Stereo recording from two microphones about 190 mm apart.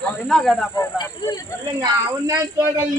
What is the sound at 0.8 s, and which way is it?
Speech, 15° left (ahead or behind).